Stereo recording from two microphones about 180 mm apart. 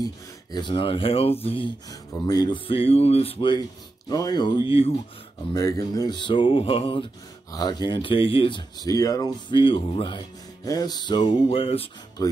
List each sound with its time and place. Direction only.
0.0 s speech: 25° left (ahead or behind)
1.9 s speech: 20° left (ahead or behind)
5.5 s speech: 20° left (ahead or behind)
12.2 s speech: 20° left (ahead or behind)